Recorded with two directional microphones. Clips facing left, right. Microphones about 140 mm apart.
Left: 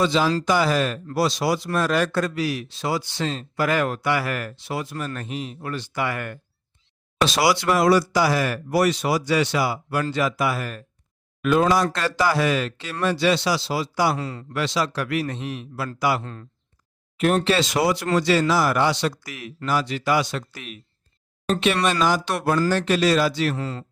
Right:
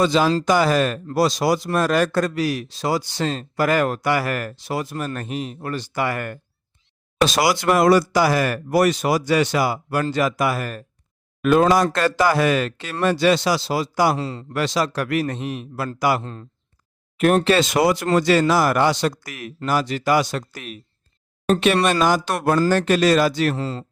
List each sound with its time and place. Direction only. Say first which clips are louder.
0.0 s a man's voice: right 3 dB; 45° right (ahead or behind)
14.2 s speech: right 3 dB; 25° right (ahead or behind)
14.5 s a man's voice: right 2 dB; 45° right (ahead or behind)
16.2 s speech: right 2 dB; 25° right (ahead or behind)
17.2 s a man's voice: right 3 dB; 55° right (ahead or behind)
23.6 s speech: right 3 dB; 30° right (ahead or behind)